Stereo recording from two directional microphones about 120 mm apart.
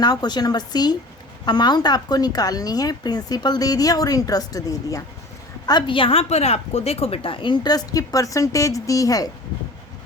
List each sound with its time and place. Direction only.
0.0 s a woman's voice: 35° left (ahead or behind)